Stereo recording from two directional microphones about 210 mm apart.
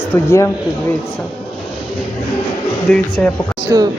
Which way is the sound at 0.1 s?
15° left (ahead or behind).